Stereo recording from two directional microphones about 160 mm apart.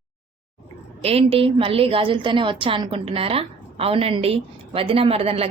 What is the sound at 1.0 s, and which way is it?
A woman's voice, 35° right (ahead or behind).